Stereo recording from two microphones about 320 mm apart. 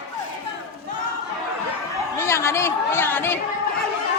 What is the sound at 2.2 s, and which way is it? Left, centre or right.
Chatter, centre.